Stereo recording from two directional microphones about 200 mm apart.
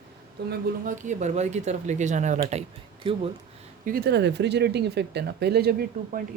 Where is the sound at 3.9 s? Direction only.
50° right (ahead or behind).